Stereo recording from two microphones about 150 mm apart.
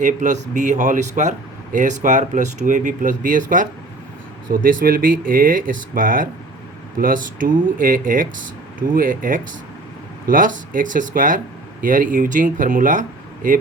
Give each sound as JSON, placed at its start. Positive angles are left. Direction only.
{"t": 0.0, "sound": "speech", "side_deg": -60}